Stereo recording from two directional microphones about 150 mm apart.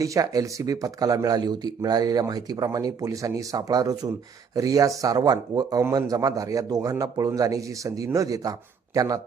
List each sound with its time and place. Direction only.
0.0 s speech: 20° right (ahead or behind)